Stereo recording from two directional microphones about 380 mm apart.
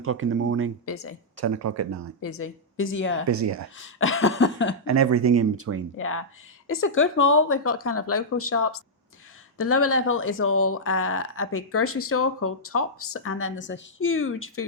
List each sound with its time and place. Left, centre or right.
0.0 s speech: right
0.9 s speech: left
1.4 s speech: right
2.2 s speech: left
3.2 s speech: right
3.8 s speech: left
4.9 s speech: right
6.0 s speech: left